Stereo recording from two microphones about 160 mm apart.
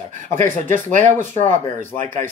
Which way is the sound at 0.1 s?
50° right (ahead or behind).